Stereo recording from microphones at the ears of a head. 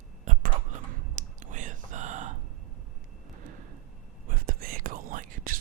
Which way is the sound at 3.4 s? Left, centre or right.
Right.